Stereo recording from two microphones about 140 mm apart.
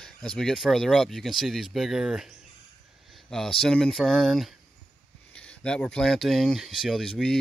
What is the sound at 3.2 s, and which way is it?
Speech, 5° left (ahead or behind).